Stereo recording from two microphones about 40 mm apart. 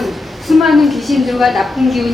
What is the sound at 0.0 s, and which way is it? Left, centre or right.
A woman's voice, centre.